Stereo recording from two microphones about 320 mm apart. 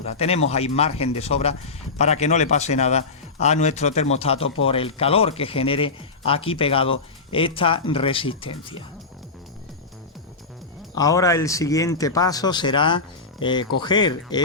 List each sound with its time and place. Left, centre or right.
0.0 s a man's voice: centre
10.9 s speech: centre